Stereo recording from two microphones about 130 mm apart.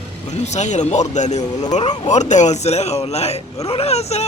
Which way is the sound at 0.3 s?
60° left (ahead or behind).